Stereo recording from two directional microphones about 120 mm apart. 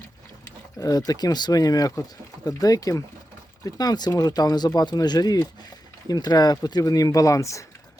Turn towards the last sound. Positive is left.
turn(degrees=25)  # may be behind; listen again after turning